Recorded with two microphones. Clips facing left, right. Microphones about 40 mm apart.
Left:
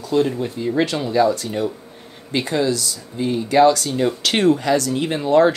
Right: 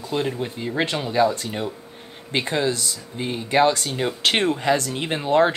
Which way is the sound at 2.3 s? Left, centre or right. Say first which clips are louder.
Left 3 dB; right.